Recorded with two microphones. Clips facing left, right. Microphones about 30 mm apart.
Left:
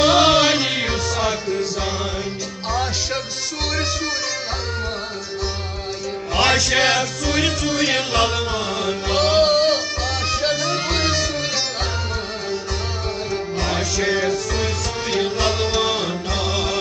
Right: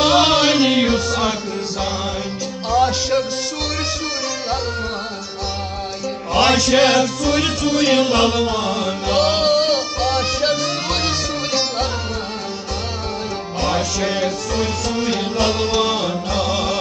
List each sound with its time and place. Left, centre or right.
0.0 s chant: right
0.9 s music: right
2.7 s music: right
6.3 s music: right
13.6 s music: right